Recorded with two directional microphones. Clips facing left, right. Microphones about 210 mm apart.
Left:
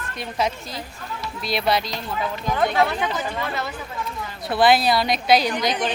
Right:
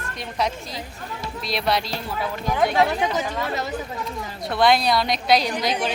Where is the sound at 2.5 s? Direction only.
10° right (ahead or behind).